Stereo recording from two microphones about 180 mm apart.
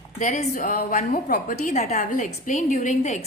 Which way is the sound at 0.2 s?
40° left (ahead or behind).